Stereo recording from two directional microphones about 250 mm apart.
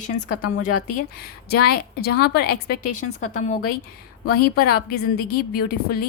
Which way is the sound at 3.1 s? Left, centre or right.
Left.